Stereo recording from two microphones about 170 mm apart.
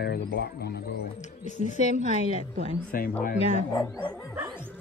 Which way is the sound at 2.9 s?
55° left (ahead or behind).